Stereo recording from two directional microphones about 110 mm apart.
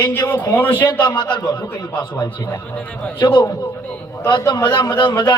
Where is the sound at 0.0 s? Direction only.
20° left (ahead or behind).